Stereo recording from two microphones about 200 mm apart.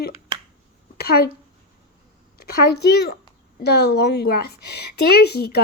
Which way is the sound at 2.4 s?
50° left (ahead or behind).